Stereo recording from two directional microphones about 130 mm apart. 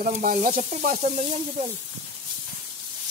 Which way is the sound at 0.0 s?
90° right.